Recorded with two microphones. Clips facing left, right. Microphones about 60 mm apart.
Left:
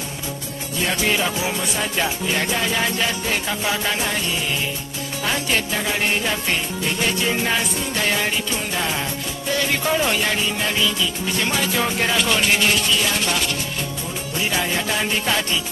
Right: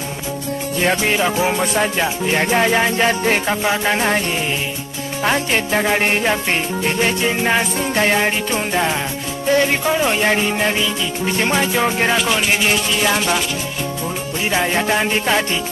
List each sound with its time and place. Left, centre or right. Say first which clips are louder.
1.0 s music: right 3 dB; right
1.4 s music: right 7 dB; right
5.2 s music: right 5 dB; right
9.5 s music: right 7 dB; right
9.8 s music: right 3 dB; centre
10.1 s music: right 5 dB; right
12.2 s music: right 2 dB; centre
14.5 s music: right 7 dB; right